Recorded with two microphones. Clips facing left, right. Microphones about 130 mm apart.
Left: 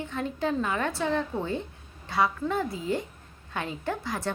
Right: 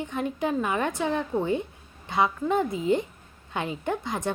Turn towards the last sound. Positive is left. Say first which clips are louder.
# right 2 dB
turn(degrees=-20)  # may be behind; listen again after turning